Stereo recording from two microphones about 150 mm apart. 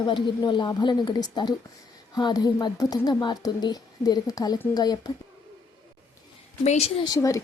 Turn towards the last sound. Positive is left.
turn(degrees=20)  # may be behind; listen again after turning